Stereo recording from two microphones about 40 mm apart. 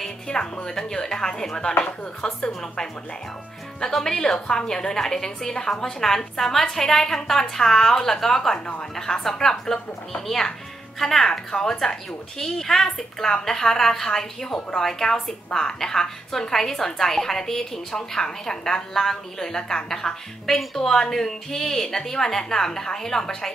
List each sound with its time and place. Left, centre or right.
0.3 s a woman's voice: left
1.7 s speech: left
2.2 s a woman's voice: centre